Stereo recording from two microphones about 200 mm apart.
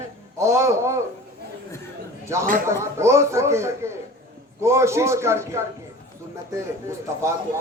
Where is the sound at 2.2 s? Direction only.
15° right (ahead or behind).